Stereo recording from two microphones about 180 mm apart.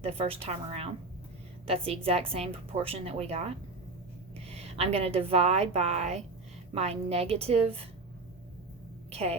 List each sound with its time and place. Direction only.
0.0 s a woman's voice: 35° right (ahead or behind)
9.0 s a woman's voice: 35° right (ahead or behind)